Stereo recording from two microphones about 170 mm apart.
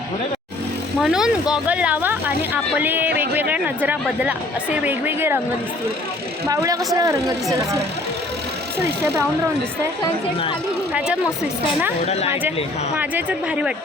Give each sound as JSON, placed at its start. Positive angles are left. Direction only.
{"t": 1.0, "sound": "speech", "side_deg": -5}
{"t": 6.5, "sound": "speech", "side_deg": -20}
{"t": 12.3, "sound": "speech", "side_deg": -10}